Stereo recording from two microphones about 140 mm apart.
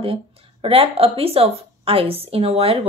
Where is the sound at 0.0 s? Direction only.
45° right (ahead or behind).